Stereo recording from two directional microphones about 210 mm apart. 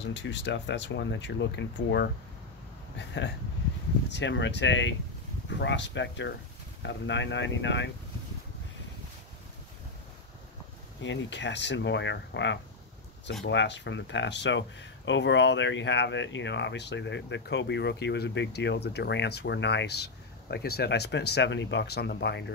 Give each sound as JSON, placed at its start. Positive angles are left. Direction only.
{"t": 0.0, "sound": "speech", "side_deg": 55}
{"t": 4.1, "sound": "speech", "side_deg": 55}
{"t": 11.0, "sound": "speech", "side_deg": 60}